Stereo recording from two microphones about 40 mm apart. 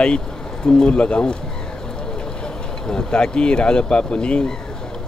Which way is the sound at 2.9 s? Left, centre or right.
Left.